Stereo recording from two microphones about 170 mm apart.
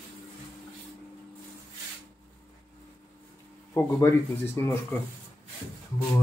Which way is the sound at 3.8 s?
15° left (ahead or behind).